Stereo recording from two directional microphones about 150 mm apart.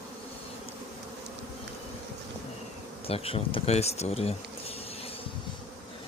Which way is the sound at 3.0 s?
40° left (ahead or behind).